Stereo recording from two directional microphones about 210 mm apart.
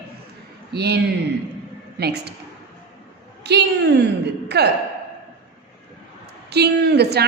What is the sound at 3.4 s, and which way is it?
A woman's voice, 55° right (ahead or behind).